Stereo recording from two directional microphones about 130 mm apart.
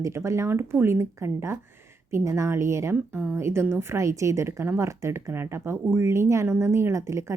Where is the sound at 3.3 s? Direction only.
20° right (ahead or behind).